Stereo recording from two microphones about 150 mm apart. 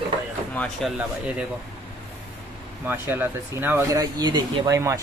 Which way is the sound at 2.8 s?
15° right (ahead or behind).